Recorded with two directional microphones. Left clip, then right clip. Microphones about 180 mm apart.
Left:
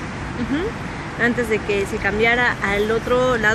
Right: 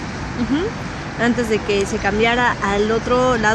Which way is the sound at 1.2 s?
55° right (ahead or behind).